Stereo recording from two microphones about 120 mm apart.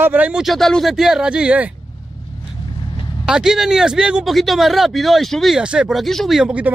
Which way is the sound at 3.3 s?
5° right (ahead or behind).